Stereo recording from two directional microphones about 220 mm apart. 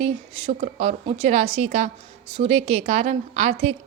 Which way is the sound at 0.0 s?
30° right (ahead or behind).